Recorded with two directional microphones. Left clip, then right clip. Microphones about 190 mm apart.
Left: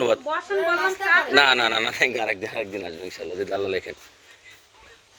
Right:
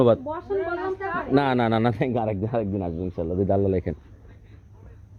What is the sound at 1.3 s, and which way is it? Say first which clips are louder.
Speech: left 4 dB; 20° right (ahead or behind).